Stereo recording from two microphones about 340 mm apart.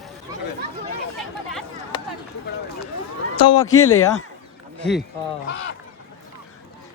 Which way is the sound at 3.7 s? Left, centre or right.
Left.